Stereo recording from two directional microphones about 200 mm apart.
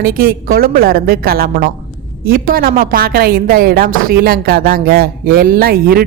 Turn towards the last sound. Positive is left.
turn(degrees=-50)  # may be behind; listen again after turning